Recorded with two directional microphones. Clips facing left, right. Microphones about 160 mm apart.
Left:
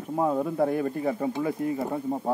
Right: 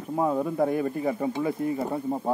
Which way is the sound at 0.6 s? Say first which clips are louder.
Even; 10° right (ahead or behind).